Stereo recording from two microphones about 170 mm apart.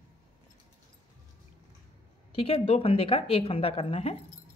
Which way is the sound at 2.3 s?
30° left (ahead or behind).